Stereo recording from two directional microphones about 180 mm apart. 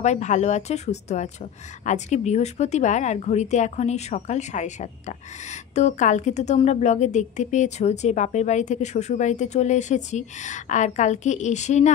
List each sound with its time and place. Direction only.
0.0 s speech: 40° left (ahead or behind)